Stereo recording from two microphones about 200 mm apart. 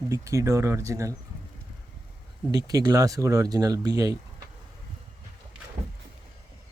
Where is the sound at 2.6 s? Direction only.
20° right (ahead or behind).